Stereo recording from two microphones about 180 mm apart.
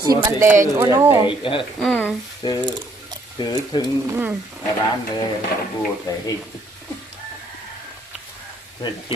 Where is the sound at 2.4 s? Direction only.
25° left (ahead or behind).